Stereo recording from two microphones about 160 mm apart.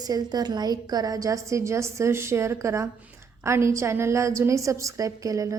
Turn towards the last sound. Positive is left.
turn(degrees=-20)  # may be behind; listen again after turning